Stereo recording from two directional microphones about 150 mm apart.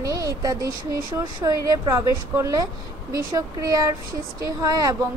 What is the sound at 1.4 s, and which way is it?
A woman's voice, 25° right (ahead or behind).